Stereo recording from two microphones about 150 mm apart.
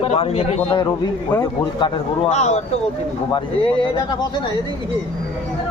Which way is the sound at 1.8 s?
45° left (ahead or behind).